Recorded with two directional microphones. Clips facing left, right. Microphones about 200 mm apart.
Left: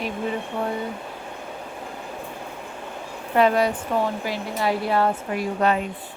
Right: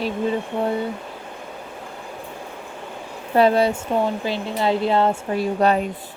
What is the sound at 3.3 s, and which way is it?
Speech, 30° right (ahead or behind).